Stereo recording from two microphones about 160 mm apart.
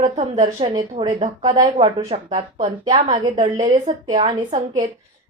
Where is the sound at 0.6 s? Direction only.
30° right (ahead or behind).